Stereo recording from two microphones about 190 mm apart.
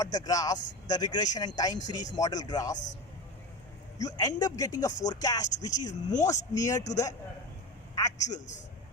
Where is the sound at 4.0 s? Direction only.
20° left (ahead or behind).